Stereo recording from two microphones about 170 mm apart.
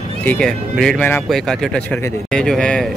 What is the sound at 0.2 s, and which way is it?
Speech, 5° left (ahead or behind).